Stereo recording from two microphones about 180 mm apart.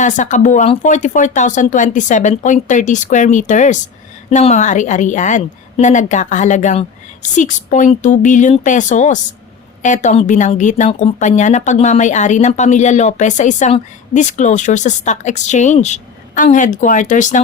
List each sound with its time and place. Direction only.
0.0 s a woman's voice: 45° left (ahead or behind)